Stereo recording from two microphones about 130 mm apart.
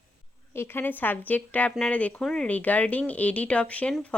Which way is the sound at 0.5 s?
15° left (ahead or behind).